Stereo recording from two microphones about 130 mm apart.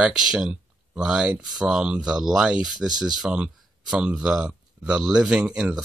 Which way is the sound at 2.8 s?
30° right (ahead or behind).